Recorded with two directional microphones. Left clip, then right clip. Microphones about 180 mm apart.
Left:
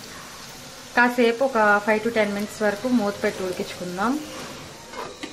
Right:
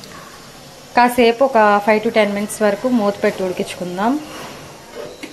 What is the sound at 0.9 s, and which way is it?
A woman's voice, 20° right (ahead or behind).